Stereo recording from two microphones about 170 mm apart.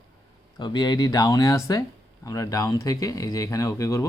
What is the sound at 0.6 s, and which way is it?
Speech, 25° left (ahead or behind).